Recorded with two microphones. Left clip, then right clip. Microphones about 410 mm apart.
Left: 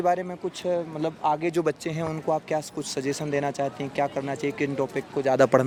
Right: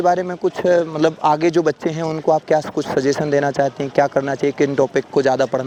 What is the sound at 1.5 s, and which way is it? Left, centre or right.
Speech, right.